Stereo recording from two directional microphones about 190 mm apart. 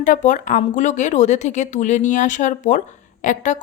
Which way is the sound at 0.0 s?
40° left (ahead or behind).